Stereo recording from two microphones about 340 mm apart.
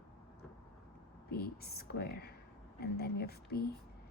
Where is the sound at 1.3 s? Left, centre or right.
Left.